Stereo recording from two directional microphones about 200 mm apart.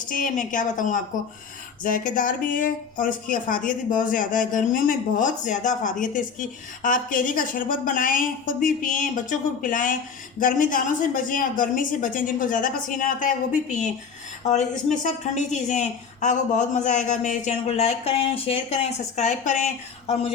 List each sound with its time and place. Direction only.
0.1 s speech: 40° left (ahead or behind)